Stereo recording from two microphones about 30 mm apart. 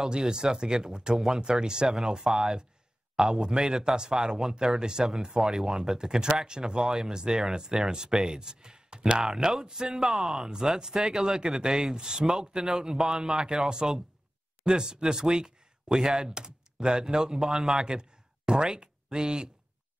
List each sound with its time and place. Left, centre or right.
0.0 s speech: right
1.1 s speech: centre
1.4 s speech: right
9.9 s speech: centre
10.4 s speech: right